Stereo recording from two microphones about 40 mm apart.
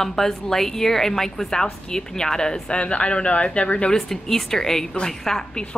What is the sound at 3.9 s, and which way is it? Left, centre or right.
Speech, centre.